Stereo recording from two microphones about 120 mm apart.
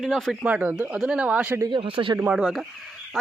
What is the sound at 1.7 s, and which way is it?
Speech, 50° right (ahead or behind).